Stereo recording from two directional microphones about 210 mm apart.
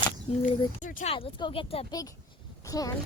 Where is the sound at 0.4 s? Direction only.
35° left (ahead or behind).